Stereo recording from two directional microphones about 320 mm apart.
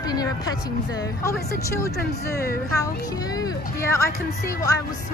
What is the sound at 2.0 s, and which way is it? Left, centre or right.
Speech, left.